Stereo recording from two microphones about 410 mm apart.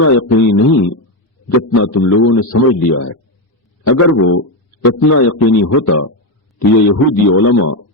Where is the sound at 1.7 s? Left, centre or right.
Left.